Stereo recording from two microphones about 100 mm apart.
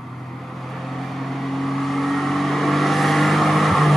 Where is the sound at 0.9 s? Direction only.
Centre (ahead or behind).